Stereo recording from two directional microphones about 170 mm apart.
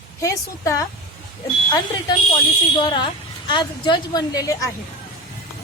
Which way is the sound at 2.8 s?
30° left (ahead or behind).